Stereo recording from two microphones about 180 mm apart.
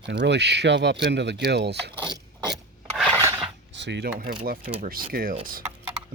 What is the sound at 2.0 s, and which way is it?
Ratchet, 25° right (ahead or behind).